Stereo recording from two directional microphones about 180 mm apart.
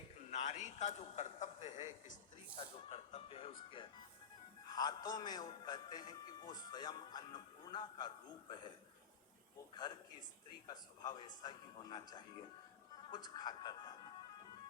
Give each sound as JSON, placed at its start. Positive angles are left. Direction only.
{"t": 0.3, "sound": "a sound", "side_deg": 40}
{"t": 2.6, "sound": "a man's voice", "side_deg": 35}
{"t": 9.7, "sound": "a man's voice", "side_deg": 25}